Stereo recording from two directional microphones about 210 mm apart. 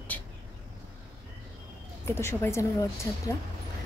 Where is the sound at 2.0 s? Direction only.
10° left (ahead or behind).